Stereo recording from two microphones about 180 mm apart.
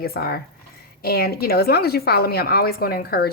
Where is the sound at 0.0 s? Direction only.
60° left (ahead or behind).